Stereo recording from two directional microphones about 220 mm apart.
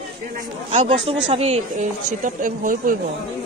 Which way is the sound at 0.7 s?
30° right (ahead or behind).